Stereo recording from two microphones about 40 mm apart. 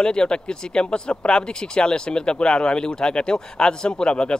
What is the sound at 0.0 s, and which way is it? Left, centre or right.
A man's voice, left.